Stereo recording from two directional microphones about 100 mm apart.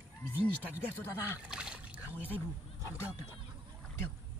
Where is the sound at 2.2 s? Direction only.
20° left (ahead or behind).